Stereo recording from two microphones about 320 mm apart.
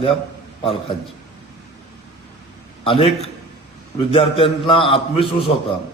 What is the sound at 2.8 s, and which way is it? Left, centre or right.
A man's voice, centre.